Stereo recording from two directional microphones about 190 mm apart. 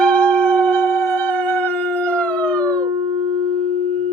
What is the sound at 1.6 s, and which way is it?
Howl, 10° left (ahead or behind).